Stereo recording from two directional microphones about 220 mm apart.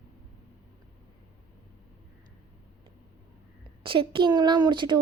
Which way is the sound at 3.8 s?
25° right (ahead or behind).